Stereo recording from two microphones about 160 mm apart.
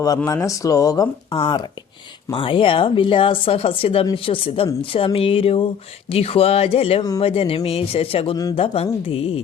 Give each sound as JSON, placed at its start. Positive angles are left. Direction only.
{"t": 0.4, "sound": "a woman's voice", "side_deg": 20}